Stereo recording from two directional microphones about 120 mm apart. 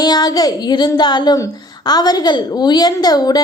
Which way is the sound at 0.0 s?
35° left (ahead or behind).